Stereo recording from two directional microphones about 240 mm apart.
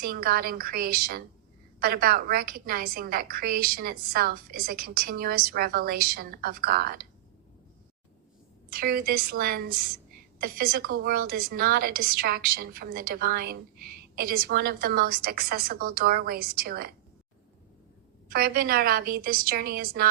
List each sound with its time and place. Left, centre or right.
0.0 s a woman's voice: right
8.7 s a woman's voice: right
18.3 s a woman's voice: right